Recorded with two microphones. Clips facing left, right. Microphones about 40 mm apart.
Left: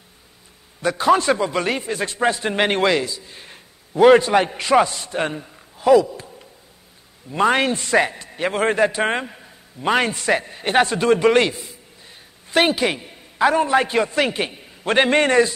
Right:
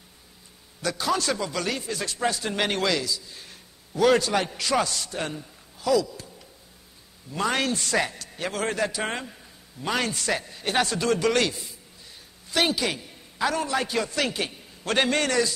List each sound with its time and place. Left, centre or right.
0.8 s a man's voice: left